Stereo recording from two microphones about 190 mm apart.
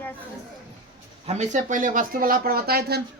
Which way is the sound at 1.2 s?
35° right (ahead or behind).